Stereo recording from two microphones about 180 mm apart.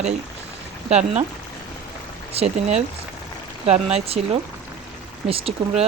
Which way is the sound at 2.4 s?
35° right (ahead or behind).